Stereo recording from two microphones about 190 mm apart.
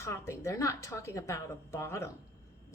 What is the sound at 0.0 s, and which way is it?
A woman's voice, 15° left (ahead or behind).